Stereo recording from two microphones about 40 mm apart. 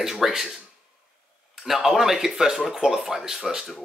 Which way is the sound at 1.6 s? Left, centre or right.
Centre.